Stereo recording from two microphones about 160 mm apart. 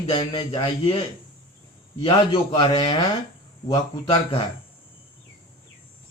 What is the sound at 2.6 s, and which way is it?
Speech, 25° left (ahead or behind).